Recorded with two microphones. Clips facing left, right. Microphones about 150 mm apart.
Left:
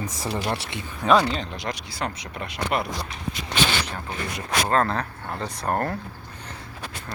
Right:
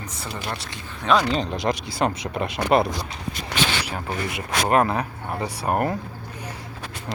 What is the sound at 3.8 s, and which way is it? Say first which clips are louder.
Speech: right 3 dB; 10° right (ahead or behind).